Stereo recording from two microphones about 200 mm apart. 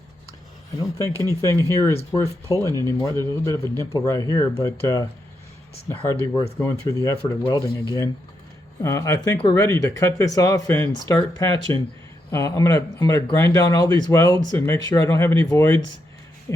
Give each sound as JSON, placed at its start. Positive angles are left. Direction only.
{"t": 1.1, "sound": "speech", "side_deg": -15}
{"t": 1.4, "sound": "speech", "side_deg": 15}